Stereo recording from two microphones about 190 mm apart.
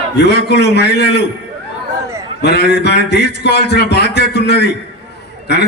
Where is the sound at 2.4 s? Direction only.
60° left (ahead or behind).